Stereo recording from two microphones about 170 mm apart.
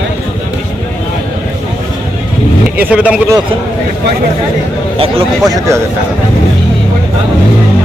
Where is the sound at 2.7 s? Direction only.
5° right (ahead or behind).